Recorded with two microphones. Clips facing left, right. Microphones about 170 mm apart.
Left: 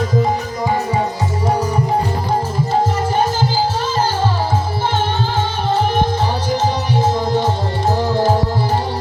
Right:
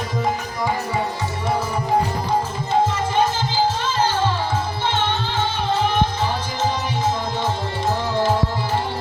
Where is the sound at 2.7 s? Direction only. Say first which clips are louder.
Left 1 dB; 40° left (ahead or behind).